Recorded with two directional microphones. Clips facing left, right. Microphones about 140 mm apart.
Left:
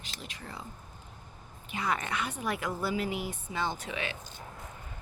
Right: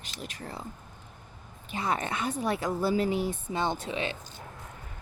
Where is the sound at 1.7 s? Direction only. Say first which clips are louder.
Right 2 dB; 30° right (ahead or behind).